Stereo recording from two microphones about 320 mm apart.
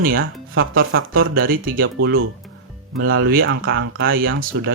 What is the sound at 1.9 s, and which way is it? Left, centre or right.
Speech, right.